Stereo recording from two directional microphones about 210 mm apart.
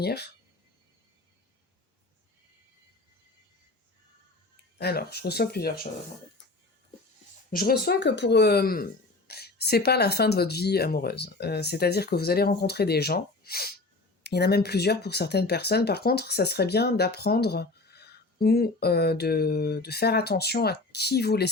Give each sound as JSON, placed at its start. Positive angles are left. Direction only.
{"t": 0.0, "sound": "speech", "side_deg": 50}
{"t": 4.8, "sound": "speech", "side_deg": 50}
{"t": 7.5, "sound": "speech", "side_deg": 45}